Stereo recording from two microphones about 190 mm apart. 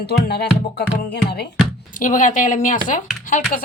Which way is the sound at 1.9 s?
45° left (ahead or behind).